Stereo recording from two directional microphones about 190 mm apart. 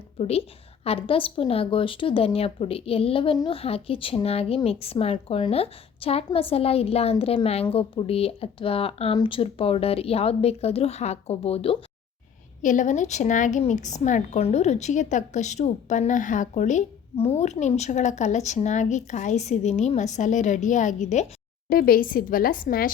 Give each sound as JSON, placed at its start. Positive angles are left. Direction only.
{"t": 0.2, "sound": "a woman's voice", "side_deg": 30}
{"t": 21.7, "sound": "a woman's voice", "side_deg": 50}